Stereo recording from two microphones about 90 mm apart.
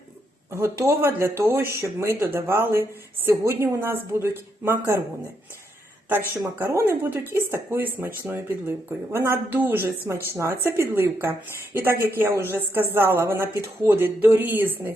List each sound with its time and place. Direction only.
0.5 s speech: 30° right (ahead or behind)
6.1 s speech: 25° right (ahead or behind)